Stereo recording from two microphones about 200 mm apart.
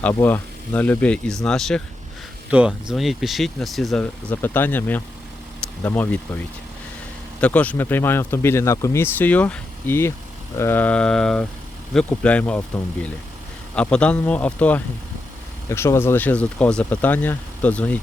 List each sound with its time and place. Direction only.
0.0 s speech: 10° left (ahead or behind)
7.4 s speech: 5° left (ahead or behind)